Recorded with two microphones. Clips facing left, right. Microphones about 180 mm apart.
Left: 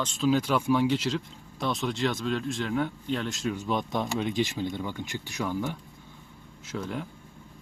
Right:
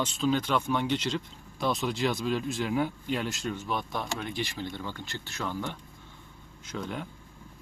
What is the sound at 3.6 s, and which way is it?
Speech, 20° left (ahead or behind).